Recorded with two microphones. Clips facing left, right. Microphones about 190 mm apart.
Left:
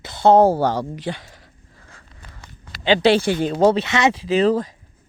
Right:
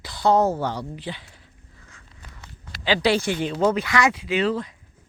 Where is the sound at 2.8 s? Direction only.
25° left (ahead or behind); by 4.7 s 40° left (ahead or behind).